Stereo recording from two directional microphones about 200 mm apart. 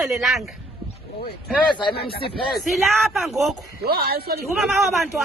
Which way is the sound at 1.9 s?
50° left (ahead or behind).